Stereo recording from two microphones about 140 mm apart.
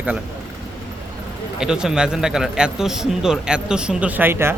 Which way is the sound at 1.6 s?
5° right (ahead or behind).